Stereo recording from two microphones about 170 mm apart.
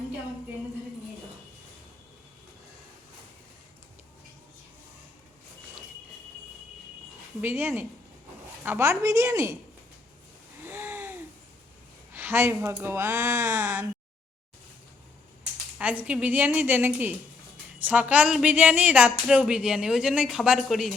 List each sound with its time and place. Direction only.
7.4 s speech: 15° right (ahead or behind)
10.7 s a sound: 15° right (ahead or behind)
12.1 s speech: 15° right (ahead or behind)
15.8 s speech: 10° right (ahead or behind)